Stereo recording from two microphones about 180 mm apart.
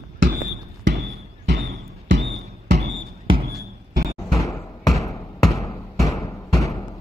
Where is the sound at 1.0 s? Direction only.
65° right (ahead or behind).